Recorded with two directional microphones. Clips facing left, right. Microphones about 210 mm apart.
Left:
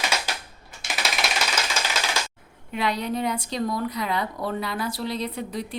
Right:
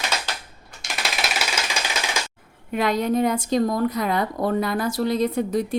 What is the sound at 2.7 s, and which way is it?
Speech, 45° right (ahead or behind).